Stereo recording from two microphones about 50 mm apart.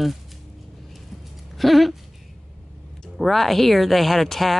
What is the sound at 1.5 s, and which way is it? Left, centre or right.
Speech, centre.